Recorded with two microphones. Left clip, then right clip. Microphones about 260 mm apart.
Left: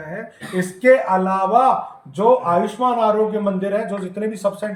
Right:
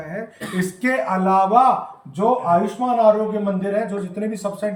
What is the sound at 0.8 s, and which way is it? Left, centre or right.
Speech, centre.